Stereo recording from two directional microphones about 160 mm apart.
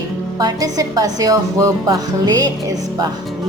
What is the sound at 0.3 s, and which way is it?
A woman's voice, 20° right (ahead or behind).